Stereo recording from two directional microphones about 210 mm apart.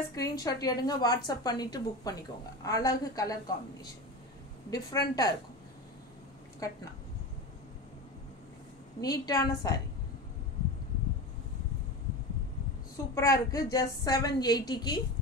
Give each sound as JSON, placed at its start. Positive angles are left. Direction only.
{"t": 0.1, "sound": "a woman's voice", "side_deg": 15}
{"t": 4.6, "sound": "a woman's voice", "side_deg": 20}
{"t": 6.6, "sound": "a woman's voice", "side_deg": 15}
{"t": 9.0, "sound": "a woman's voice", "side_deg": 20}
{"t": 13.1, "sound": "a woman's voice", "side_deg": 15}